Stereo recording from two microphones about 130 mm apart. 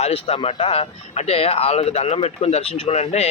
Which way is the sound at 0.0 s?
50° left (ahead or behind).